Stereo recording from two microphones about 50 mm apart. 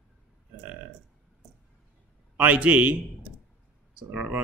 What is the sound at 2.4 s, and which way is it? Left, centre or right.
Speech, right.